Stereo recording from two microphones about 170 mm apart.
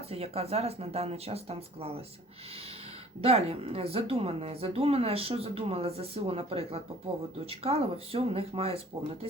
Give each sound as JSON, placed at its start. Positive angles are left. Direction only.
{"t": 0.1, "sound": "a woman's voice", "side_deg": -35}
{"t": 3.2, "sound": "a woman's voice", "side_deg": -35}